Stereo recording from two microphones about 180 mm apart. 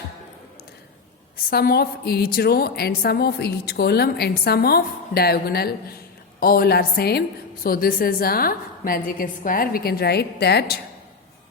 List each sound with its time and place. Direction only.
1.5 s a woman's voice: 60° left (ahead or behind)